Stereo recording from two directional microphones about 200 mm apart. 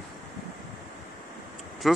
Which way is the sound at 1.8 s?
Centre (ahead or behind).